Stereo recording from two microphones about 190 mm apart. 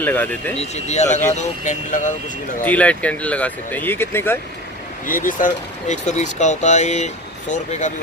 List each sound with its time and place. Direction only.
0.0 s speech: 10° left (ahead or behind)
0.6 s speech: 35° left (ahead or behind)
2.6 s speech: 10° left (ahead or behind)
5.0 s speech: 45° left (ahead or behind)